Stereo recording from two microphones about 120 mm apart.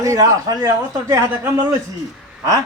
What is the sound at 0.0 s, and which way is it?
A woman's voice, 30° right (ahead or behind).